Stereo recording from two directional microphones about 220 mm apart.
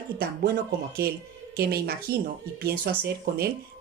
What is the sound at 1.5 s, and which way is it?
Speech, 45° right (ahead or behind).